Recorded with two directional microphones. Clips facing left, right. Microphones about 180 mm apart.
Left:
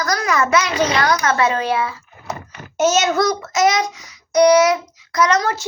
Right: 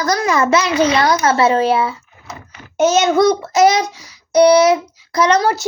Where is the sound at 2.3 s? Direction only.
65° left (ahead or behind).